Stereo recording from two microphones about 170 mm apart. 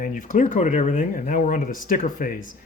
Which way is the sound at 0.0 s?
50° left (ahead or behind).